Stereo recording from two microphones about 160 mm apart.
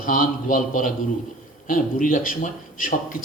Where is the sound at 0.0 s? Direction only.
55° left (ahead or behind).